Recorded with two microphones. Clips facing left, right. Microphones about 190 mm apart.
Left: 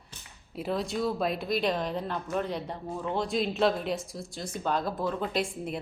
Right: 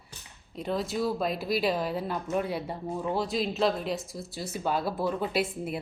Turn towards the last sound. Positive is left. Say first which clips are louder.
# right 1 dB
turn(degrees=-5)  # may be behind; listen again after turning